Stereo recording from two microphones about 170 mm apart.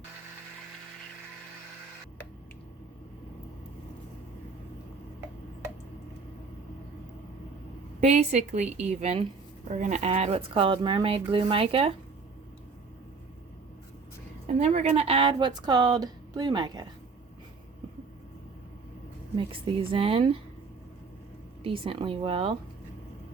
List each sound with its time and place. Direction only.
8.0 s speech: 40° right (ahead or behind)
14.4 s speech: 40° right (ahead or behind); by 16.9 s 25° right (ahead or behind)
19.5 s speech: 30° right (ahead or behind)
21.6 s speech: 30° right (ahead or behind)